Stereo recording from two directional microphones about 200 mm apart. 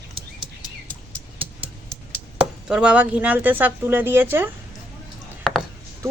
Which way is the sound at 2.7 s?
5° right (ahead or behind).